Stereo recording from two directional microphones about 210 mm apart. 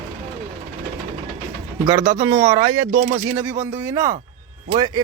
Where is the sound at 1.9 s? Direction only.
15° right (ahead or behind).